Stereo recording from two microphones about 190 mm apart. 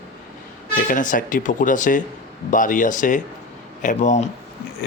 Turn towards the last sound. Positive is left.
turn(degrees=40)  # may be behind; listen again after turning